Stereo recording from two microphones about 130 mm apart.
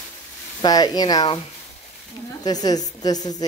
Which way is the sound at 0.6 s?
30° left (ahead or behind).